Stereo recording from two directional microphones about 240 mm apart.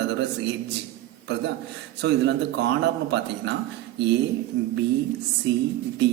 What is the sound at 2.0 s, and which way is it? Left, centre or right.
Speech, right.